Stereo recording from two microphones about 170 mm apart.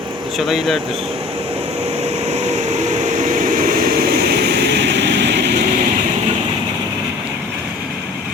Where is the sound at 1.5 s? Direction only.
35° right (ahead or behind); by 5.6 s 80° right.